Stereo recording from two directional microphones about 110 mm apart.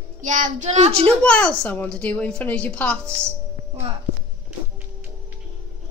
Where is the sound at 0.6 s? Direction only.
90° right.